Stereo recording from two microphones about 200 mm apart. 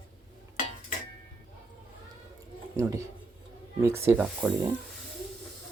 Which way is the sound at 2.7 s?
15° right (ahead or behind).